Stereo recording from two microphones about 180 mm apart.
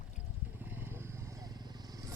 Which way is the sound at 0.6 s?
10° right (ahead or behind).